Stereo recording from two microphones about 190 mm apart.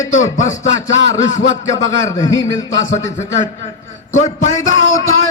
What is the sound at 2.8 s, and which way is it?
A man's voice, 40° left (ahead or behind).